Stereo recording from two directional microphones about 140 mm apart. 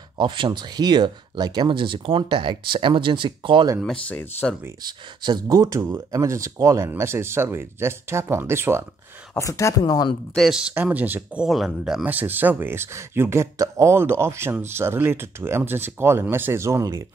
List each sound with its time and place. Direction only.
0.2 s speech: 35° right (ahead or behind)
3.8 s speech: 10° left (ahead or behind)
4.8 s speech: 30° right (ahead or behind)
9.3 s speech: 20° left (ahead or behind)
10.3 s speech: centre (ahead or behind)
11.4 s speech: centre (ahead or behind); by 17.0 s 20° right (ahead or behind)